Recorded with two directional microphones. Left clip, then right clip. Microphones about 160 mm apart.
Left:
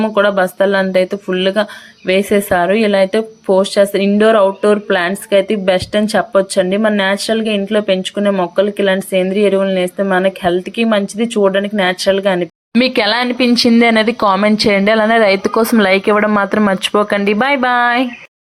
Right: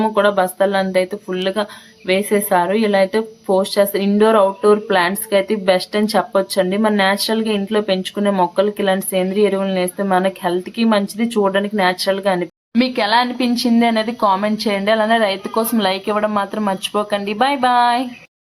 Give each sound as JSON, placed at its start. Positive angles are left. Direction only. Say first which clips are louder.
{"t": 0.0, "sound": "a woman's voice", "louder": "left 2 dB", "side_deg": 20}
{"t": 12.8, "sound": "speech", "louder": "left 2 dB", "side_deg": 35}